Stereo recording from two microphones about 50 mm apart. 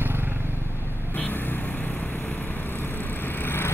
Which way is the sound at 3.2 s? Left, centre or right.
Left.